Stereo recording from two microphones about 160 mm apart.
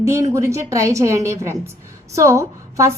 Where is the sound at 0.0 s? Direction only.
20° right (ahead or behind).